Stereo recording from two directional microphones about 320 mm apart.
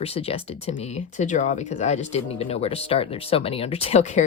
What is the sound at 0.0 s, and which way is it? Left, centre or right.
Speech, centre.